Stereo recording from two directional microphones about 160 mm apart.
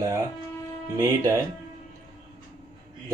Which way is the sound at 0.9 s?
20° right (ahead or behind).